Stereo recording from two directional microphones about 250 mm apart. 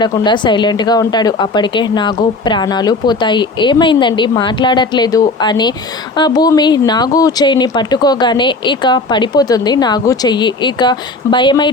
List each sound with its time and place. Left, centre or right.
0.0 s speech: centre